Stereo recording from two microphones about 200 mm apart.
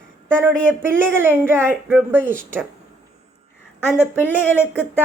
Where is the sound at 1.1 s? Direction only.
10° right (ahead or behind).